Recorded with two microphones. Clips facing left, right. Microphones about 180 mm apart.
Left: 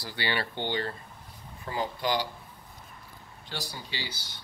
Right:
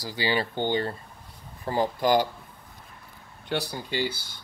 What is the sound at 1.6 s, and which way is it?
Speech, 45° right (ahead or behind).